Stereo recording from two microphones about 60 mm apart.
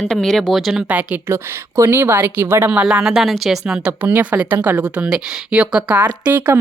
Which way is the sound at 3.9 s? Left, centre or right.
Right.